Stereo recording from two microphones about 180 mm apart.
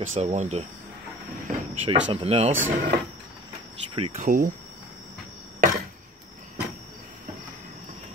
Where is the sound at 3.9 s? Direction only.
35° right (ahead or behind).